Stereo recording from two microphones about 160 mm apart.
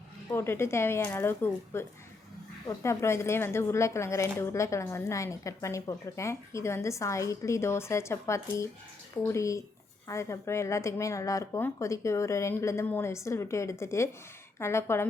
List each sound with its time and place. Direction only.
0.3 s speech: 15° left (ahead or behind)